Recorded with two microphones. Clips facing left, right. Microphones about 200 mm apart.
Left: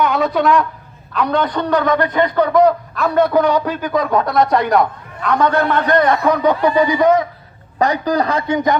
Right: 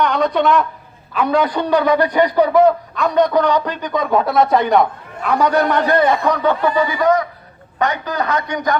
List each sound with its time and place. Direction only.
0.0 s a man's voice: 5° left (ahead or behind); by 5.8 s 15° right (ahead or behind)
5.9 s a man's voice: 5° right (ahead or behind)
6.3 s speech: 15° left (ahead or behind)
7.8 s a man's voice: 35° left (ahead or behind)